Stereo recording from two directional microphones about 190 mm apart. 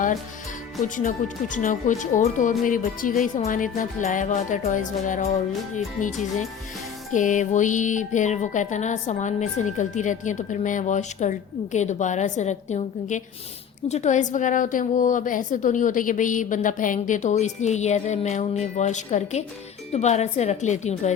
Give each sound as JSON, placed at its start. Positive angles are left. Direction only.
{"t": 0.9, "sound": "speech", "side_deg": 40}